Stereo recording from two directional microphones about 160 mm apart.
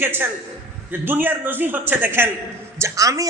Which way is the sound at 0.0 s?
15° right (ahead or behind).